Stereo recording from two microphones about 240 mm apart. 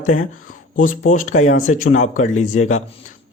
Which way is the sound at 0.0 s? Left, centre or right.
Left.